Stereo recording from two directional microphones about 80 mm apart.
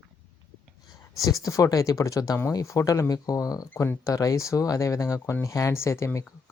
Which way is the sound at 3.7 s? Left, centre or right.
Left.